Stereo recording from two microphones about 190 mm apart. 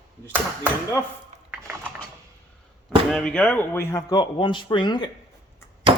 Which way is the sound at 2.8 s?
5° left (ahead or behind).